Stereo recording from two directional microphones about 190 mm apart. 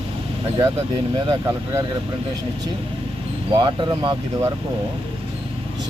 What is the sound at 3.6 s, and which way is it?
Speech, 25° right (ahead or behind).